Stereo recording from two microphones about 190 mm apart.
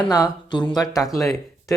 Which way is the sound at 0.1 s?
20° left (ahead or behind).